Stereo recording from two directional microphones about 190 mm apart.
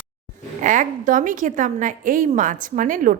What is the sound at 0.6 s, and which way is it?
A woman's voice, 45° right (ahead or behind).